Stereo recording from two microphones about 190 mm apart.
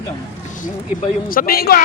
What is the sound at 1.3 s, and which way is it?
Speech, 50° left (ahead or behind).